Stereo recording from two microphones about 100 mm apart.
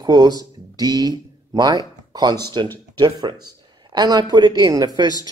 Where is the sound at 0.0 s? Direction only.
40° right (ahead or behind).